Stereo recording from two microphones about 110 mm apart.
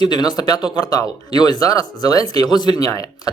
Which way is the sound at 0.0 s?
40° left (ahead or behind).